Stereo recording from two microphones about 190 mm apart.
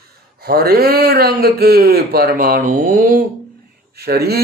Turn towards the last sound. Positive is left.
turn(degrees=-55)  # may be behind; listen again after turning